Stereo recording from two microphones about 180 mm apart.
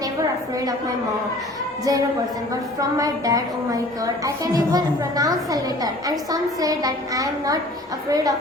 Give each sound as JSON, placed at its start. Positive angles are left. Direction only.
{"t": 1.8, "sound": "a woman's voice", "side_deg": -20}